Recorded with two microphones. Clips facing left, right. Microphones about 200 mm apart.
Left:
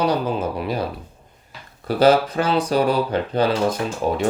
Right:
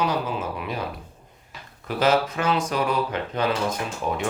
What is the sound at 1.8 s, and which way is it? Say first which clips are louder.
Speech: left 6 dB; 35° left (ahead or behind).